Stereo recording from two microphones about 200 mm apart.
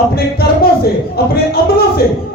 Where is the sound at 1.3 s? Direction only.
50° left (ahead or behind).